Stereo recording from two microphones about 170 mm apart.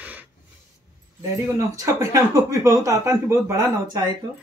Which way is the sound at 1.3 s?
20° right (ahead or behind).